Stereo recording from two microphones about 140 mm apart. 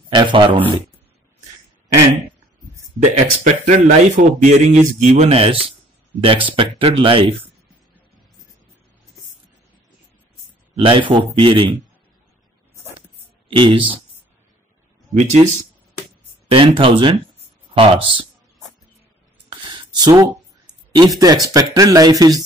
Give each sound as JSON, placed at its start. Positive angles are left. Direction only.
{"t": 0.1, "sound": "speech", "side_deg": -35}
{"t": 3.0, "sound": "speech", "side_deg": -55}
{"t": 10.8, "sound": "speech", "side_deg": -40}
{"t": 13.5, "sound": "speech", "side_deg": -35}
{"t": 16.4, "sound": "speech", "side_deg": -40}
{"t": 19.6, "sound": "a sound", "side_deg": -30}
{"t": 20.9, "sound": "speech", "side_deg": -30}